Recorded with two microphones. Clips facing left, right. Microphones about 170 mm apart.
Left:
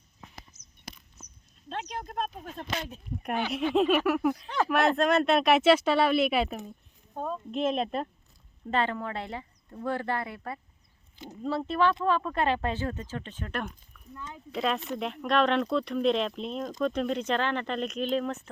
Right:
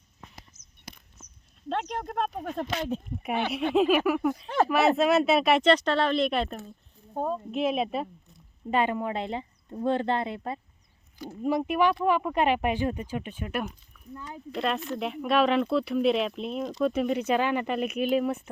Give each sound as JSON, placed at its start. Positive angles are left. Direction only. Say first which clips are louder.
{"t": 2.0, "sound": "speech", "louder": "right 4 dB", "side_deg": -65}
{"t": 3.8, "sound": "speech", "louder": "right 2 dB", "side_deg": 0}
{"t": 4.4, "sound": "speech", "louder": "right 4 dB", "side_deg": -50}
{"t": 4.7, "sound": "speech", "louder": "right 1 dB", "side_deg": -5}
{"t": 7.5, "sound": "speech", "louder": "even", "side_deg": -5}